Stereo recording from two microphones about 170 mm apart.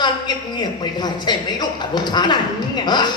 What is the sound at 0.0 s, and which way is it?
A woman's voice, 25° left (ahead or behind).